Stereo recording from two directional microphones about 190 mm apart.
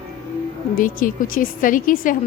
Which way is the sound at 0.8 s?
45° left (ahead or behind).